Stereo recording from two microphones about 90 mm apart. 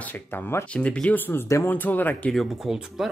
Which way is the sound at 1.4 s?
35° left (ahead or behind).